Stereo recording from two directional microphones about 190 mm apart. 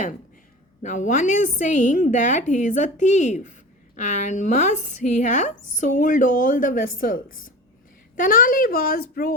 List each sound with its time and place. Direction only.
0.8 s a woman's voice: 40° left (ahead or behind)